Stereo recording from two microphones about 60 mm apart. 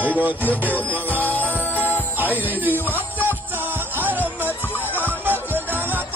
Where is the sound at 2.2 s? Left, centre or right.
Right.